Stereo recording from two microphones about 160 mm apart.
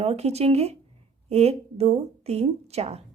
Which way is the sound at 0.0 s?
40° right (ahead or behind).